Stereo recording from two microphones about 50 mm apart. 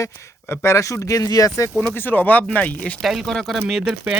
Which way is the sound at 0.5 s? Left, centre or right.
Left.